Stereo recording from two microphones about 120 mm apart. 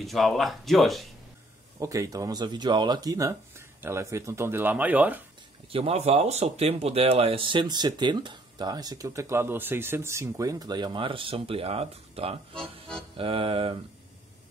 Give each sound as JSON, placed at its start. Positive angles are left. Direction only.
{"t": 0.0, "sound": "speech", "side_deg": 0}
{"t": 1.8, "sound": "speech", "side_deg": -25}
{"t": 5.7, "sound": "speech", "side_deg": -55}
{"t": 12.5, "sound": "music", "side_deg": 5}
{"t": 13.2, "sound": "mantra", "side_deg": -50}